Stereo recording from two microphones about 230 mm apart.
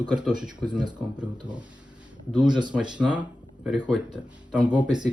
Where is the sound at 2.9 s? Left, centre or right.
Centre.